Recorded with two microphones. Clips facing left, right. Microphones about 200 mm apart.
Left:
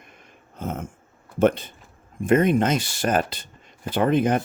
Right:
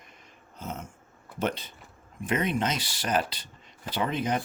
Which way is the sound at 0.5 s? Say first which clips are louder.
Left 7 dB; 55° left (ahead or behind).